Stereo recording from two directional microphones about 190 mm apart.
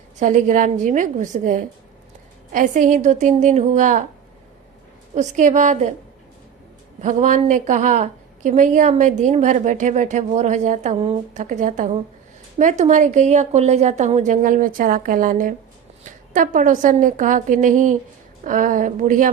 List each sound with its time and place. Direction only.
0.2 s a woman's voice: 40° right (ahead or behind)
5.1 s a woman's voice: 40° right (ahead or behind)
7.0 s a woman's voice: 40° right (ahead or behind)